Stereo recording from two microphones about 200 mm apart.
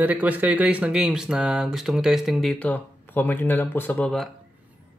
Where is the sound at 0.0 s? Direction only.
5° right (ahead or behind).